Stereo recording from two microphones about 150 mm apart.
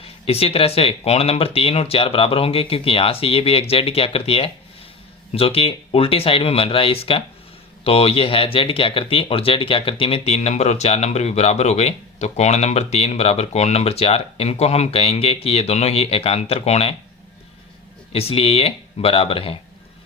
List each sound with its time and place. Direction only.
0.0 s speech: 40° left (ahead or behind)
18.1 s speech: 40° left (ahead or behind)